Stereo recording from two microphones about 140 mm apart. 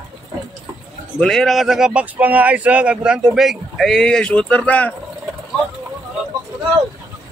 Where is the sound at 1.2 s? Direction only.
5° left (ahead or behind).